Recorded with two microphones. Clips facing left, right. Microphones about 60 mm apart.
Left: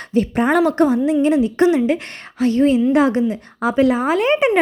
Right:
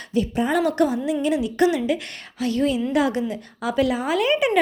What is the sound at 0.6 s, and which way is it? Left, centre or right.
A woman's voice, left.